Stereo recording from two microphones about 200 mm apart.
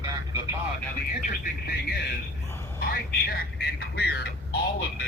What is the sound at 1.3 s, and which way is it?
Speech, 50° left (ahead or behind).